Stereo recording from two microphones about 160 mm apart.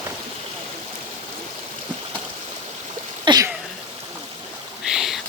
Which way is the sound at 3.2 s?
25° right (ahead or behind).